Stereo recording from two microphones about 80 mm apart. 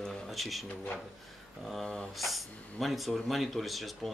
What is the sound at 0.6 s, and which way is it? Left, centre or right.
Speech, centre.